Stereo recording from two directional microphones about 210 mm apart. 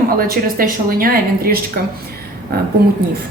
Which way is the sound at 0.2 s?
45° right (ahead or behind).